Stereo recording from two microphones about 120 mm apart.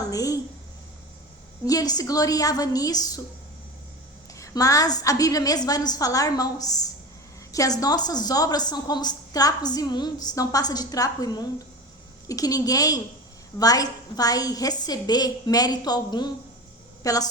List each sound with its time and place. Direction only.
0.1 s a sound: 30° left (ahead or behind)
1.6 s a woman's voice: 30° left (ahead or behind)
4.4 s a woman's voice: 30° left (ahead or behind)